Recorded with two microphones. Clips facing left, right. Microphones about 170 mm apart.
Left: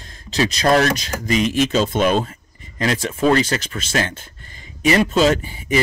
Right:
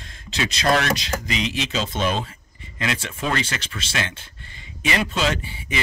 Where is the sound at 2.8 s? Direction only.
40° left (ahead or behind).